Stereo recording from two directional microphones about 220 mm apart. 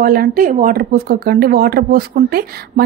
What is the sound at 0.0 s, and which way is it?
Speech, 40° right (ahead or behind).